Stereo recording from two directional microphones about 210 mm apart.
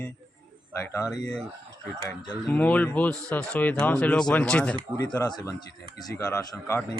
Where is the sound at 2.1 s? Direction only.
20° left (ahead or behind).